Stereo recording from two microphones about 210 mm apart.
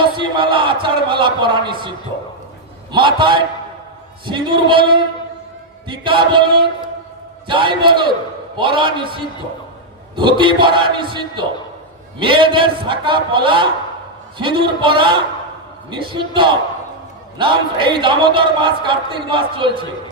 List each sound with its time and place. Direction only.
0.0 s a man's voice: 25° right (ahead or behind)
2.9 s a man's voice: 25° right (ahead or behind)